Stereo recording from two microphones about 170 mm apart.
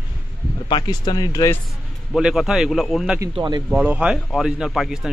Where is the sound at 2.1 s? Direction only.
5° right (ahead or behind).